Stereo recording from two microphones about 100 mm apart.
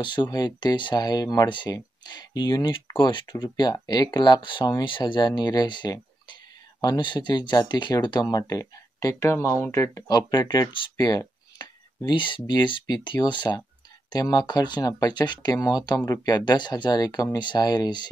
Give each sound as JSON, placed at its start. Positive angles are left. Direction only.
{"t": 0.0, "sound": "speech", "side_deg": 50}
{"t": 10.0, "sound": "speech", "side_deg": 45}